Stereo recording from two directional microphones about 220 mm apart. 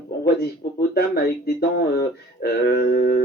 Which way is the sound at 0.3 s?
45° left (ahead or behind).